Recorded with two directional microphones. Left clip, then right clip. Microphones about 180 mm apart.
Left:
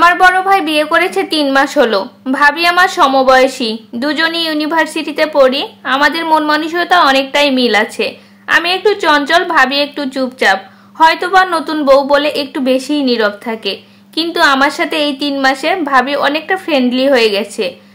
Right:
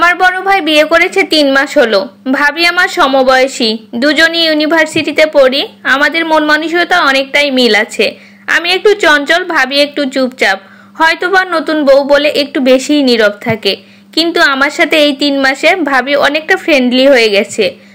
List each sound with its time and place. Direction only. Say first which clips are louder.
0.0 s a woman's voice: left 1 dB; 20° right (ahead or behind)